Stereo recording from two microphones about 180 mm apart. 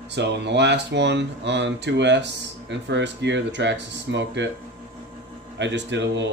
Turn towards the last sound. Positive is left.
turn(degrees=-85)